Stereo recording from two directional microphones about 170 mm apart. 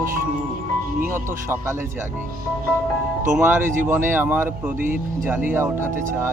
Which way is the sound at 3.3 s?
10° right (ahead or behind).